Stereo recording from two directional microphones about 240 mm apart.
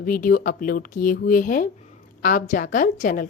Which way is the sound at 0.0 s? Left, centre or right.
Left.